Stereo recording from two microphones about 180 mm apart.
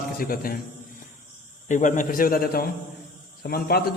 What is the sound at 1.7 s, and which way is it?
A man's voice, 45° left (ahead or behind).